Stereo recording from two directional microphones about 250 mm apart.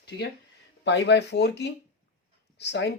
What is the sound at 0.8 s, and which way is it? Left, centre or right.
Speech, left.